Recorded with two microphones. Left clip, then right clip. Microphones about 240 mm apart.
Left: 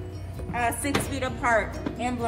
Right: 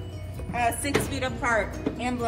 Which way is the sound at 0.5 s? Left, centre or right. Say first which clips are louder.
Right 1 dB; centre.